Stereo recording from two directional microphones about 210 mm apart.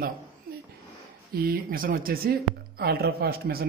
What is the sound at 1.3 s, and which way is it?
Speech, 45° right (ahead or behind).